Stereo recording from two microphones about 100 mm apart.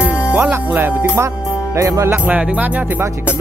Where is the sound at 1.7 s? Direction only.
35° right (ahead or behind).